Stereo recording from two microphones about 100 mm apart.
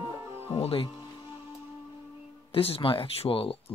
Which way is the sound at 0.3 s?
80° left.